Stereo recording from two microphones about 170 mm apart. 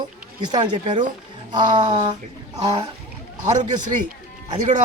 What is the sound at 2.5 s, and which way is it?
Speech, 25° right (ahead or behind).